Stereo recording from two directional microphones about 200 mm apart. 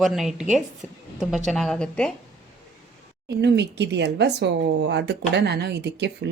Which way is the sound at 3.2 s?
60° right (ahead or behind).